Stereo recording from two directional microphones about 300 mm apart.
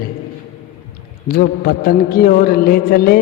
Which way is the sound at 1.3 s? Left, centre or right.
Left.